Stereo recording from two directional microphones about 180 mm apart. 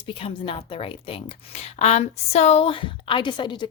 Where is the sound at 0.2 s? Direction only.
30° left (ahead or behind).